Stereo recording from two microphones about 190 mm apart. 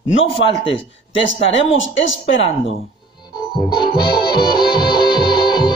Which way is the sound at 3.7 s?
55° left (ahead or behind).